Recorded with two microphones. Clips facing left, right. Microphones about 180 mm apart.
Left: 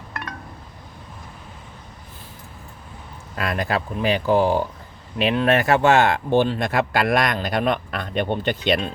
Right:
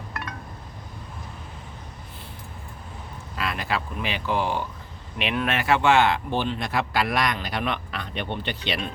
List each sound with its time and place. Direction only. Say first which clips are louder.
3.3 s speech: left 4 dB; 45° left (ahead or behind); by 5.5 s 30° left (ahead or behind)
5.5 s speech: left 4 dB; 45° left (ahead or behind)